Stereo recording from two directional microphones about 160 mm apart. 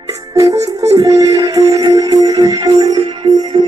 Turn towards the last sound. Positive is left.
turn(degrees=-30)  # may be behind; listen again after turning